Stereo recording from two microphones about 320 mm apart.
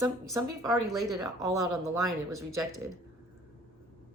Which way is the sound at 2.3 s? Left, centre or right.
Right.